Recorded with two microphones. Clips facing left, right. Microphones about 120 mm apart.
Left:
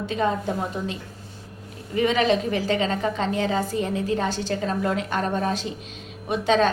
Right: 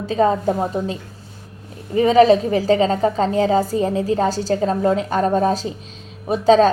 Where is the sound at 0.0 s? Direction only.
35° right (ahead or behind).